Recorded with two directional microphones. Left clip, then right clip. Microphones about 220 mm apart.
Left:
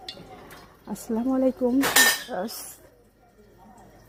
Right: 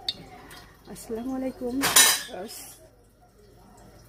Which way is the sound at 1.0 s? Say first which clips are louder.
Left 8 dB; 25° left (ahead or behind).